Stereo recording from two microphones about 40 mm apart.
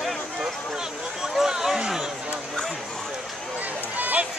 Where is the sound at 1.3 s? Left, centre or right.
Centre.